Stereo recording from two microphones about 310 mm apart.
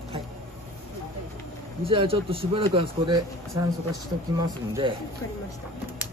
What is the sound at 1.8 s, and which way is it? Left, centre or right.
A man's voice, centre.